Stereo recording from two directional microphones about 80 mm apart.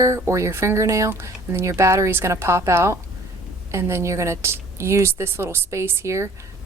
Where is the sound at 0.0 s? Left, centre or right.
Right.